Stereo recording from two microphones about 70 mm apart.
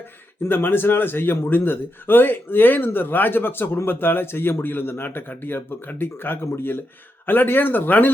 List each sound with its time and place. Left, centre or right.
0.4 s speech: left